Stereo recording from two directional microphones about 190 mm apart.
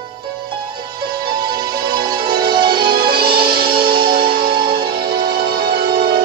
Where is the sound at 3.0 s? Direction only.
55° right (ahead or behind).